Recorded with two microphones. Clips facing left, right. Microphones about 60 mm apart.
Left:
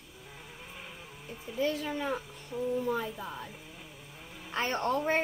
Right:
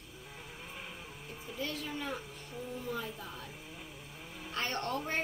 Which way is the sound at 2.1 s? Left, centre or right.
Centre.